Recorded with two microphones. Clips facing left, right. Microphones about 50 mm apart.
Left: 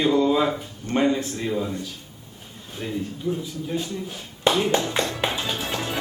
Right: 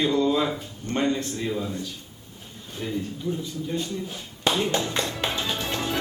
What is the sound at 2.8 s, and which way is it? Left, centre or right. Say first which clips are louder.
Speech: left 1 dB; centre.